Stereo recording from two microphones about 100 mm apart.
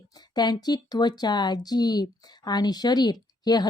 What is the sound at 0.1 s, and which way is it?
Speech, 45° left (ahead or behind).